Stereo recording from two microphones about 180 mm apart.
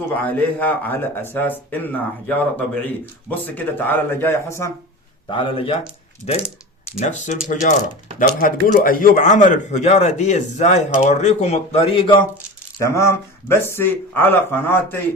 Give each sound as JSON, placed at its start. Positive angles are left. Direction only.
{"t": 0.1, "sound": "a man's voice", "side_deg": 10}
{"t": 5.3, "sound": "speech", "side_deg": 30}
{"t": 7.0, "sound": "speech", "side_deg": 40}
{"t": 12.8, "sound": "a man's voice", "side_deg": 15}